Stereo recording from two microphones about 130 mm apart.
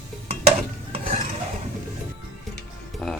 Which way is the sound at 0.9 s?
60° right (ahead or behind).